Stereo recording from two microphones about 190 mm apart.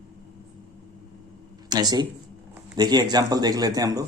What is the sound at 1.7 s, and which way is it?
A man's voice, 20° right (ahead or behind).